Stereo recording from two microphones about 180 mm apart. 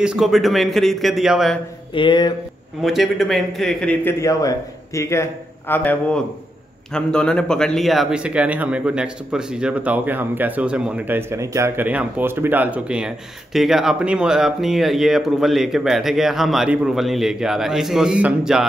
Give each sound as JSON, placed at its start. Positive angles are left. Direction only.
{"t": 0.0, "sound": "speech", "side_deg": -5}
{"t": 2.0, "sound": "speech", "side_deg": 25}
{"t": 2.8, "sound": "a man's voice", "side_deg": 0}